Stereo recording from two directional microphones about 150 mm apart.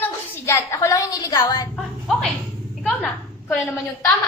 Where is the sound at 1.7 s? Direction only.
5° left (ahead or behind).